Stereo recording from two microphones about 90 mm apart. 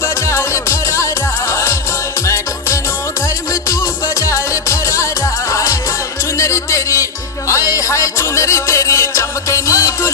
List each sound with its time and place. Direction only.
0.0 s music: 30° left (ahead or behind)